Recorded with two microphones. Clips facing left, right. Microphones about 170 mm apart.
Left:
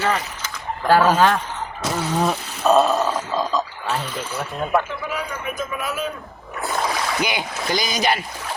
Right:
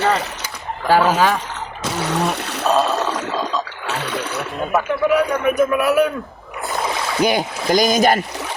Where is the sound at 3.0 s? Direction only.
75° right (ahead or behind).